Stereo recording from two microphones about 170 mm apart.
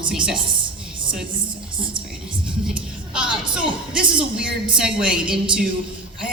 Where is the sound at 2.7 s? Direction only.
5° right (ahead or behind).